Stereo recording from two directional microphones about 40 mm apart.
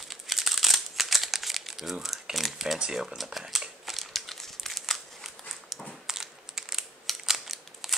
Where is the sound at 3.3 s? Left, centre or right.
Centre.